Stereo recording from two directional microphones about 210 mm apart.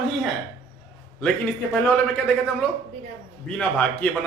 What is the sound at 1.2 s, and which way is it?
Speech, 5° left (ahead or behind).